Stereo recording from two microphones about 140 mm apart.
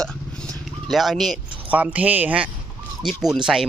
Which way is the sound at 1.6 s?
10° right (ahead or behind).